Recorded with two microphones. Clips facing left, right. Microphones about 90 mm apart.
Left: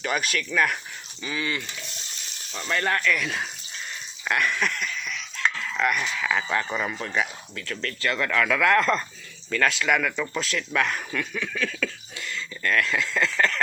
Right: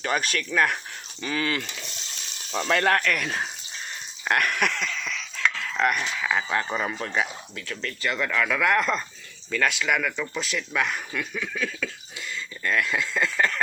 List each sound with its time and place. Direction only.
0.0 s speech: 35° right (ahead or behind)
1.2 s a sound: 55° right (ahead or behind)
2.6 s speech: 80° right; by 3.2 s 60° right (ahead or behind)
3.2 s speech: 35° right (ahead or behind)
4.2 s a sound: 55° right (ahead or behind); by 4.9 s 90° right
5.7 s speech: 45° right (ahead or behind)
6.0 s speech: 20° right (ahead or behind)